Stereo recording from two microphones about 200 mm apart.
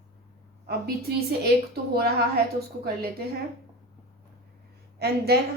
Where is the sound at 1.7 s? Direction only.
50° right (ahead or behind).